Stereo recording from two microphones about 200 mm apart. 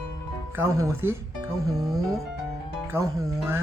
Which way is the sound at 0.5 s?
15° right (ahead or behind).